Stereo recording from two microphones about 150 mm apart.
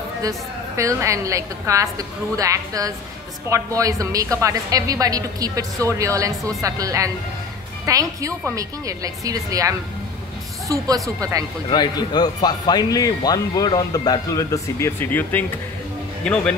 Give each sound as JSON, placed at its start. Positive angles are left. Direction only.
{"t": 0.2, "sound": "a woman's voice", "side_deg": -20}
{"t": 11.7, "sound": "speech", "side_deg": 30}